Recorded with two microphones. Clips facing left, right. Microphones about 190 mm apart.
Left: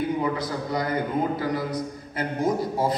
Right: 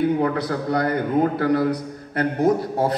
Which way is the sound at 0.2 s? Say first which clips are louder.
Right 5 dB; 65° right (ahead or behind).